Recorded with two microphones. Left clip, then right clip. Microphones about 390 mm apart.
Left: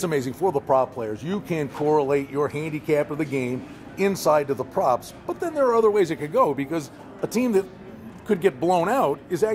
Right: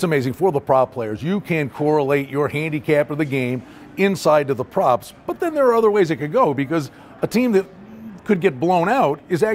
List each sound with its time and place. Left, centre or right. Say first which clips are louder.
0.0 s a man's voice: right 5 dB; right